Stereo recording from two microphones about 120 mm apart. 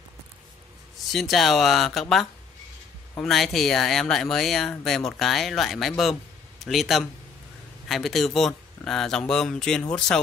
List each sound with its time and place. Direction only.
1.1 s speech: centre (ahead or behind)
3.3 s speech: centre (ahead or behind)